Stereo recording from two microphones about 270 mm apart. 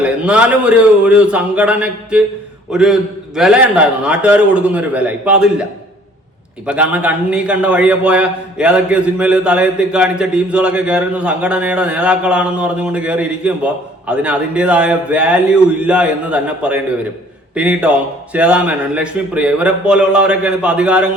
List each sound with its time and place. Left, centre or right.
0.0 s a man's voice: centre
6.7 s a man's voice: centre